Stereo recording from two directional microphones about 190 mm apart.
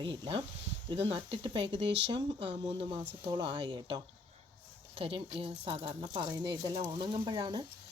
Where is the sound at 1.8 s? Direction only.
65° right (ahead or behind).